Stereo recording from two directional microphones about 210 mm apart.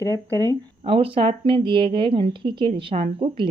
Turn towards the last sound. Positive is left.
turn(degrees=-25)  # may be behind; listen again after turning